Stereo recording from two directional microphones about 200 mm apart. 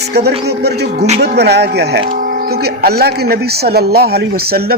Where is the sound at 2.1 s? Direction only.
45° right (ahead or behind).